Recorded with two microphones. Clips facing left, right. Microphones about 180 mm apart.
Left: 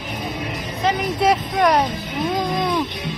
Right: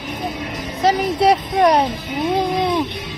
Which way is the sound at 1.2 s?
30° right (ahead or behind).